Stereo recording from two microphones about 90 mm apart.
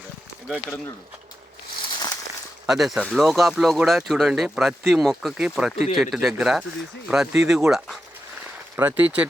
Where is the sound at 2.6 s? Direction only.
5° right (ahead or behind).